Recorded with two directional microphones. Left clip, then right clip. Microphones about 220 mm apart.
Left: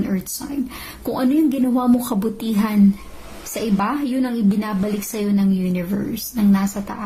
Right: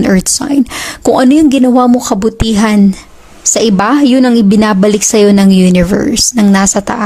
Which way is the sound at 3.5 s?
50° right (ahead or behind).